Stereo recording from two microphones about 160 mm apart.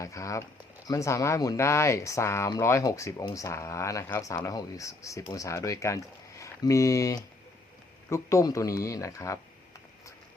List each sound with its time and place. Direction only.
0.0 s speech: 20° left (ahead or behind)